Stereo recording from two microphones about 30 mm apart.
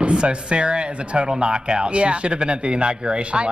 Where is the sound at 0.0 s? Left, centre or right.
Right.